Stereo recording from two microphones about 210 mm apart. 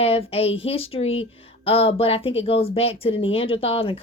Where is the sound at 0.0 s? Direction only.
30° left (ahead or behind).